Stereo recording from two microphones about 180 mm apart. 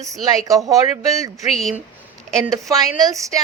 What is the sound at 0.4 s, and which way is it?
A woman's voice, 20° right (ahead or behind).